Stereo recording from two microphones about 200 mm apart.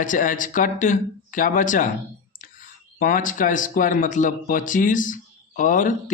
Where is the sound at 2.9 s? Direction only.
40° left (ahead or behind).